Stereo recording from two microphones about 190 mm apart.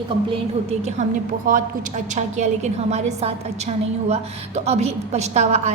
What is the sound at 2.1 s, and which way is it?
A woman's voice, 35° right (ahead or behind).